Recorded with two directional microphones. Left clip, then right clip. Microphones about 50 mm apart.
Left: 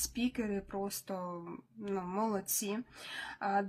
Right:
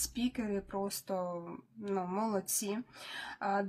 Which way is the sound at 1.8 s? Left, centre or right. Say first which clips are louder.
Even; right.